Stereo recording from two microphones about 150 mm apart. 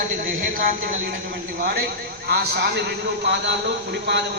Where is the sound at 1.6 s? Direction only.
90° right.